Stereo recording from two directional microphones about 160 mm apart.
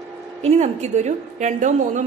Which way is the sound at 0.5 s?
45° right (ahead or behind).